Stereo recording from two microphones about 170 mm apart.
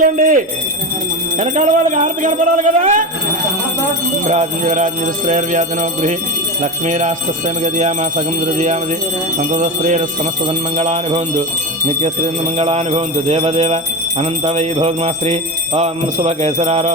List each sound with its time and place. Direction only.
0.0 s speech: 50° right (ahead or behind)
1.4 s speech: 45° right (ahead or behind)
4.3 s speech: 45° right (ahead or behind)
10.4 s music: 35° right (ahead or behind)